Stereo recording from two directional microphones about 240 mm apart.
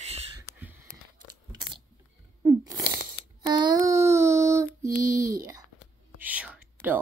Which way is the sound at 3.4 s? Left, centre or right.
Centre.